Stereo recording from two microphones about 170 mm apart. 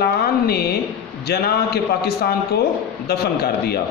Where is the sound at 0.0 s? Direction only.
65° left (ahead or behind).